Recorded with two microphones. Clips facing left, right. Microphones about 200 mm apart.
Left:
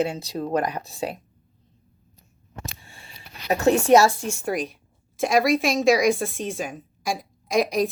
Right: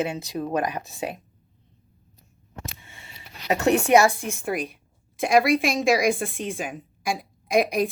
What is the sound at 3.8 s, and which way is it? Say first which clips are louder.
Speech: left 2 dB; 15° right (ahead or behind).